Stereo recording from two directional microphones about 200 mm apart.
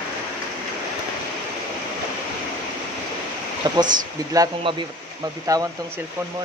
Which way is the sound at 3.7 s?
20° right (ahead or behind).